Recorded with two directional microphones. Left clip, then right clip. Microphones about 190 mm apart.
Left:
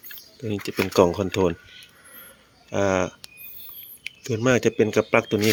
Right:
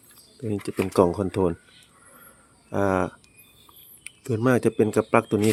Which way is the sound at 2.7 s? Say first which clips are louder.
Left 1 dB; 5° right (ahead or behind).